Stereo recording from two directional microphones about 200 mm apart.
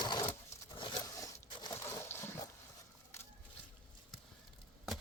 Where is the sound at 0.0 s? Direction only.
20° left (ahead or behind).